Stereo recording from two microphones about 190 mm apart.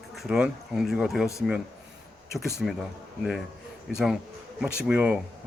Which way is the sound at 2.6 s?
Centre (ahead or behind).